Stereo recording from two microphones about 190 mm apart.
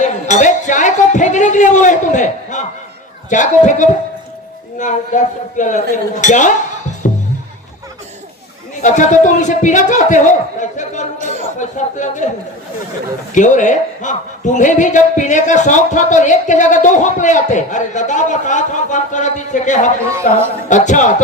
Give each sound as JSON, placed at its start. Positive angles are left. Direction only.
{"t": 0.0, "sound": "a sound", "side_deg": 40}
{"t": 3.2, "sound": "a man's voice", "side_deg": 40}
{"t": 7.0, "sound": "music", "side_deg": 40}
{"t": 8.8, "sound": "a man's voice", "side_deg": 40}
{"t": 11.2, "sound": "speech", "side_deg": -35}
{"t": 11.6, "sound": "a man's voice", "side_deg": 40}
{"t": 13.3, "sound": "a man's voice", "side_deg": 40}